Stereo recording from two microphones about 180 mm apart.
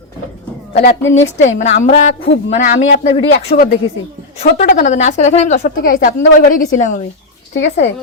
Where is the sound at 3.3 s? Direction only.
55° left (ahead or behind).